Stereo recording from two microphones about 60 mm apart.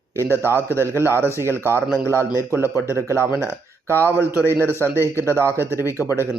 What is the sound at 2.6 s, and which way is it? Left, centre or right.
Speech, left.